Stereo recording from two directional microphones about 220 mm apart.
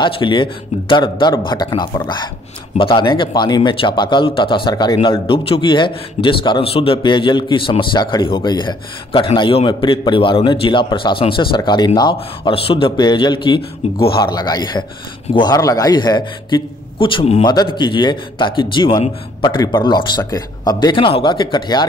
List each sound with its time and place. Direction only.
0.0 s a man's voice: 20° left (ahead or behind)
13.6 s speech: 45° left (ahead or behind)
14.2 s a man's voice: 20° left (ahead or behind)